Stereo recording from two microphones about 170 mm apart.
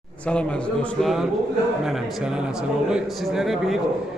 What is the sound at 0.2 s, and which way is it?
A man's voice, 5° left (ahead or behind).